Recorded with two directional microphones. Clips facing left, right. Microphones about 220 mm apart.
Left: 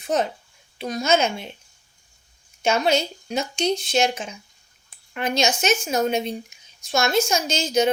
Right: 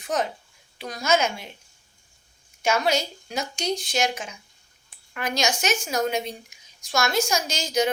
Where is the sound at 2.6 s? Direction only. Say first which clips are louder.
Left 3 dB; 25° left (ahead or behind).